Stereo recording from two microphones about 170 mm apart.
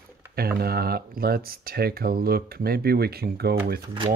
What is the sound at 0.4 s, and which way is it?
Speech, 65° right (ahead or behind).